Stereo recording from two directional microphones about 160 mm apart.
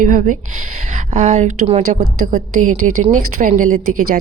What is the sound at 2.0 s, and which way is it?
A woman's voice, 60° right (ahead or behind).